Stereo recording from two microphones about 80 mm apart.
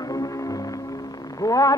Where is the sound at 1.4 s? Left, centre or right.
Left.